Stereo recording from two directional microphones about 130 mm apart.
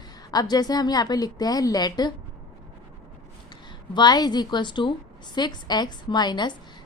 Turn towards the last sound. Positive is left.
turn(degrees=35)  # may be behind; listen again after turning